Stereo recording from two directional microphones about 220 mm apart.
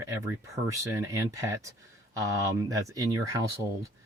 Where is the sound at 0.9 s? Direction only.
15° right (ahead or behind).